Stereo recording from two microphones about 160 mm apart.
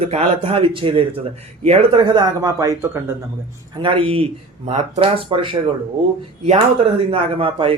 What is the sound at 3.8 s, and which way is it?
Speech, 35° right (ahead or behind).